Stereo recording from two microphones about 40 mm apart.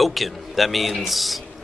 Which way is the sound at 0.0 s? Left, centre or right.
Centre.